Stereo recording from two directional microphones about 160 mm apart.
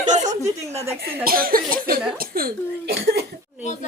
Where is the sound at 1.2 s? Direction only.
65° right (ahead or behind).